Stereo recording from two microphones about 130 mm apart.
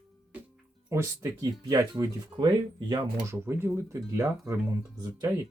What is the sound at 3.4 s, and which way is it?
Speech, 20° right (ahead or behind).